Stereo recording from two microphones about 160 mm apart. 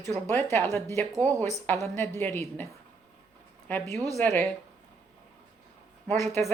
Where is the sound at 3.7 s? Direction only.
15° left (ahead or behind).